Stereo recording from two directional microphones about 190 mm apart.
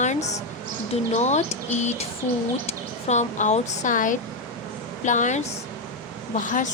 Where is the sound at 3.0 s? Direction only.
40° left (ahead or behind).